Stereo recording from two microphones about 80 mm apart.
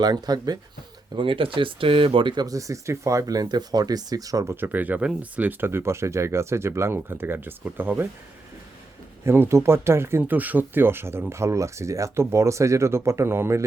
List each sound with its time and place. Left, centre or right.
0.0 s speech: right
1.1 s speech: right
2.6 s speech: right
4.4 s speech: right
9.2 s speech: right